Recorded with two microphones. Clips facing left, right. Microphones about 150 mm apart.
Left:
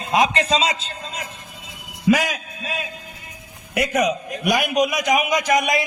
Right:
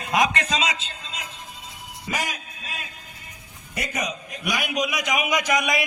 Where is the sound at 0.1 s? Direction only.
30° left (ahead or behind).